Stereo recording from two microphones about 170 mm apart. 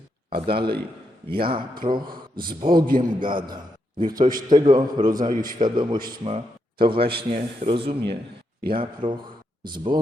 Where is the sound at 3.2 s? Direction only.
30° right (ahead or behind).